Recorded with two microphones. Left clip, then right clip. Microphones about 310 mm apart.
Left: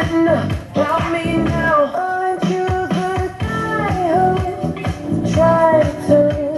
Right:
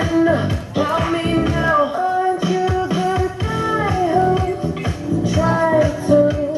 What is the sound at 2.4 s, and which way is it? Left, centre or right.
Music, centre.